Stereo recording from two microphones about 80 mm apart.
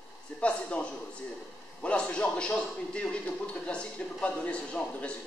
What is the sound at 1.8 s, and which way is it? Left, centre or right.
A man's voice, centre.